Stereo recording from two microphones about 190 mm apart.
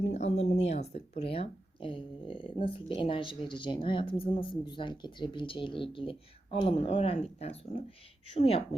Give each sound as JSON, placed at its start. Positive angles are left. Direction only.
{"t": 0.1, "sound": "speech", "side_deg": 35}